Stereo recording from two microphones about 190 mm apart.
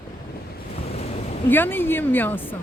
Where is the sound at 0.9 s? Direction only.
35° left (ahead or behind).